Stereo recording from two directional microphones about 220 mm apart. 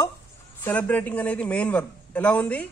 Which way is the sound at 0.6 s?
5° left (ahead or behind).